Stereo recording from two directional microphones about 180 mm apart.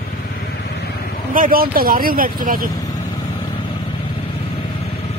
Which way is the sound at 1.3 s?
50° right (ahead or behind).